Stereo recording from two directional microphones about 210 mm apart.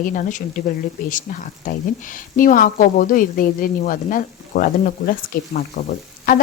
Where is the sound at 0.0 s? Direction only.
40° left (ahead or behind).